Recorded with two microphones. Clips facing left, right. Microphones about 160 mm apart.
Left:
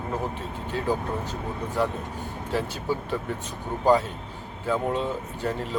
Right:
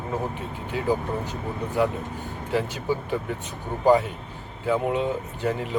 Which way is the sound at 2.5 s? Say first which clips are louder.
Right 2 dB; 15° right (ahead or behind).